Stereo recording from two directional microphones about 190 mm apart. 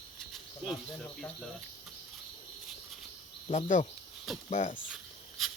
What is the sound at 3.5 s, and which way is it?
Speech, 40° left (ahead or behind).